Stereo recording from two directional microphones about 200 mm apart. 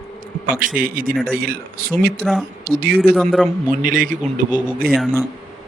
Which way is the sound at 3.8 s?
45° right (ahead or behind).